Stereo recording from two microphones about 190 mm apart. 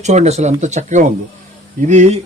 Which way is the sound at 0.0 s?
35° right (ahead or behind).